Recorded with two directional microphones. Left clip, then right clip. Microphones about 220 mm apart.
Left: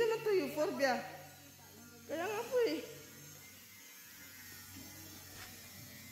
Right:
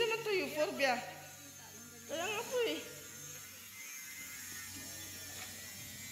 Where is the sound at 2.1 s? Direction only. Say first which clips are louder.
Left 1 dB; 35° left (ahead or behind).